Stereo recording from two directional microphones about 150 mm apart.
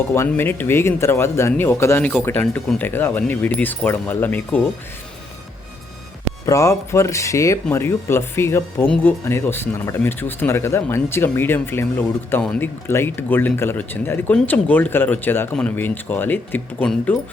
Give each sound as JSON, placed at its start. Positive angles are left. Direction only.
{"t": 0.1, "sound": "speech", "side_deg": 15}
{"t": 6.4, "sound": "speech", "side_deg": 20}